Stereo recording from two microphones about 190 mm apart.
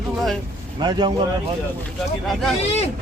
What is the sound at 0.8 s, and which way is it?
Speech, 20° right (ahead or behind).